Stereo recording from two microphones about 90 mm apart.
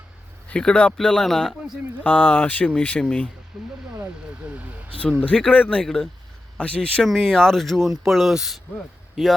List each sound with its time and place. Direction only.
0.4 s speech: 10° left (ahead or behind)
2.0 s speech: 20° left (ahead or behind)
3.5 s speech: 5° right (ahead or behind)
4.4 s speech: 15° right (ahead or behind)
5.2 s speech: 15° left (ahead or behind); by 8.5 s 5° right (ahead or behind)